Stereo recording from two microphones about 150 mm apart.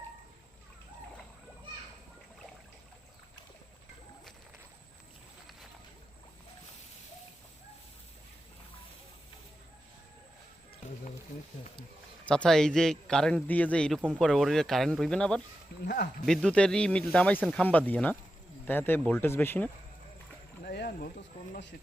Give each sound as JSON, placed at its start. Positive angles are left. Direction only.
{"t": 12.3, "sound": "a man's voice", "side_deg": 5}
{"t": 15.7, "sound": "speech", "side_deg": 90}
{"t": 16.2, "sound": "speech", "side_deg": 5}
{"t": 20.7, "sound": "a sound", "side_deg": 80}